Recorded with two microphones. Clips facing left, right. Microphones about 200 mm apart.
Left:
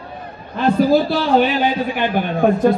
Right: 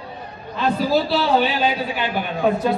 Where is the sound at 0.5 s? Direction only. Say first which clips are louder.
Left 5 dB; 50° left (ahead or behind).